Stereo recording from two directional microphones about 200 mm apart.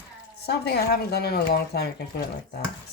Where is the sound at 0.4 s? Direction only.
50° left (ahead or behind).